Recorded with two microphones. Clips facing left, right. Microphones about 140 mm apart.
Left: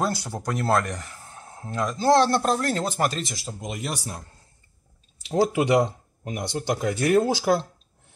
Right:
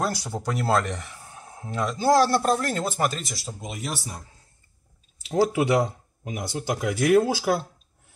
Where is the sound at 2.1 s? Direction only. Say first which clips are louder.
Even; 5° right (ahead or behind).